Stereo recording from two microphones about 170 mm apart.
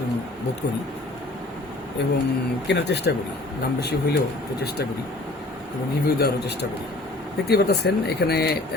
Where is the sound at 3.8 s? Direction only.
75° left (ahead or behind).